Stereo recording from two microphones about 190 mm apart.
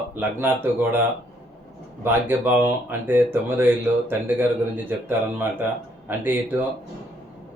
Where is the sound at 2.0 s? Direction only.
10° right (ahead or behind).